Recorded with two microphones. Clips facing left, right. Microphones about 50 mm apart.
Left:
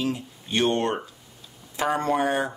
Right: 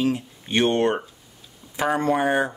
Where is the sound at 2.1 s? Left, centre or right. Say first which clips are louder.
Right 3 dB; centre.